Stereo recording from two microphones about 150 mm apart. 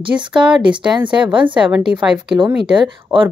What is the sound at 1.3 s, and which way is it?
Speech, 35° right (ahead or behind).